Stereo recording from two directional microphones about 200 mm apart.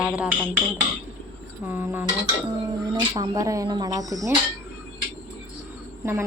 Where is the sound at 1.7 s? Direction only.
10° right (ahead or behind).